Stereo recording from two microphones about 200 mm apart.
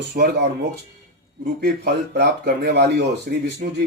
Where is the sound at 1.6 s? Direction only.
55° right (ahead or behind).